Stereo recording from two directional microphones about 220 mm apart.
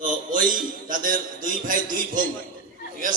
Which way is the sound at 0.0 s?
35° right (ahead or behind).